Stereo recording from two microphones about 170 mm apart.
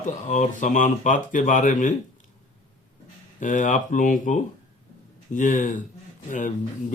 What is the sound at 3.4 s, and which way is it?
Speech, 50° left (ahead or behind).